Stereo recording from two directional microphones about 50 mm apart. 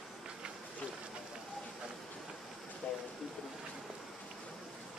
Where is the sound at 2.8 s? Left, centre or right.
Left.